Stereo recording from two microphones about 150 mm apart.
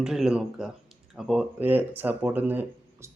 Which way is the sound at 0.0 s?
5° right (ahead or behind).